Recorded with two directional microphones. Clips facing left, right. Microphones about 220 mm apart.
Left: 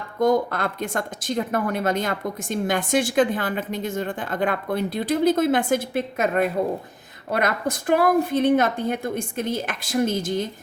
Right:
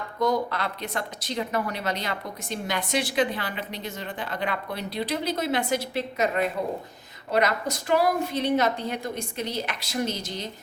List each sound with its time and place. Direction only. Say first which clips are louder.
0.2 s speech: left 5 dB; 50° left (ahead or behind)